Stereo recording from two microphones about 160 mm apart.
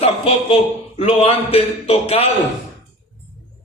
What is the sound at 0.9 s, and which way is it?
A man's voice, 35° left (ahead or behind).